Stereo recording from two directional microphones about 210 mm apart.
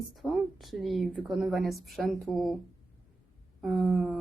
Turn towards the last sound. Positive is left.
turn(degrees=0)  # may be behind; listen again after turning